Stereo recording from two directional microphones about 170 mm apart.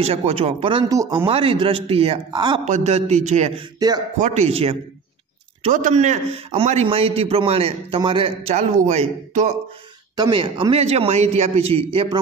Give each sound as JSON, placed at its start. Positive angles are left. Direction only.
{"t": 0.0, "sound": "a man's voice", "side_deg": -35}
{"t": 0.8, "sound": "speech", "side_deg": -20}
{"t": 1.2, "sound": "a man's voice", "side_deg": -35}
{"t": 2.6, "sound": "a man's voice", "side_deg": -40}
{"t": 5.6, "sound": "a man's voice", "side_deg": -50}
{"t": 10.1, "sound": "a man's voice", "side_deg": -25}